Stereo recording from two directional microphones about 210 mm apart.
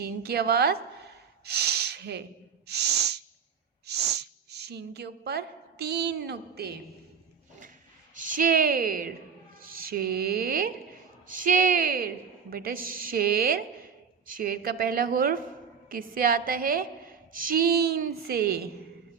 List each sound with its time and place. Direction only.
0.0 s a woman's voice: 50° right (ahead or behind)
8.1 s a woman's voice: 40° right (ahead or behind)